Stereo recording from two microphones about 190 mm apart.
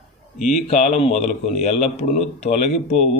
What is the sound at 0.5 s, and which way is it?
Speech, 40° left (ahead or behind).